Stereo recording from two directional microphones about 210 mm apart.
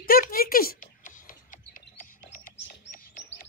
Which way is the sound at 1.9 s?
40° left (ahead or behind).